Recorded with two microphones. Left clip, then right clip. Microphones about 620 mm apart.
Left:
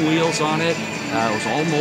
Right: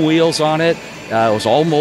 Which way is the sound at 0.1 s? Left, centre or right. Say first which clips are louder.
Right 5 dB; right.